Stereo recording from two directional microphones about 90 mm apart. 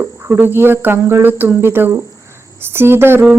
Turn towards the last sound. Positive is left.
turn(degrees=-25)  # may be behind; listen again after turning